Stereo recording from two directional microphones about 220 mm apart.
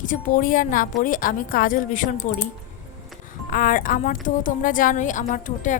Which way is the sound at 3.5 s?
40° left (ahead or behind).